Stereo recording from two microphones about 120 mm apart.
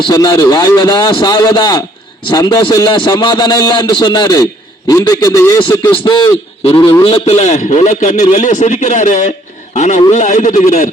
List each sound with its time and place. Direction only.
0.1 s a man's voice: 30° left (ahead or behind)
7.0 s a man's voice: 60° left (ahead or behind); by 10.8 s 90° left